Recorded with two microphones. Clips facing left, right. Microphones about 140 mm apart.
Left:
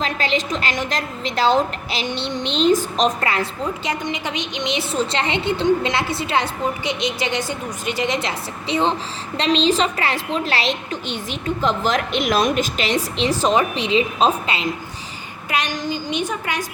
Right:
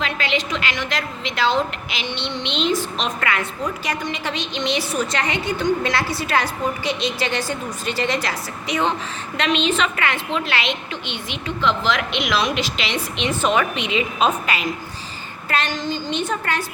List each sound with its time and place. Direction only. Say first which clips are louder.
0.0 s a woman's voice: left 2 dB; 40° left (ahead or behind)
15.4 s a woman's voice: even; 15° left (ahead or behind)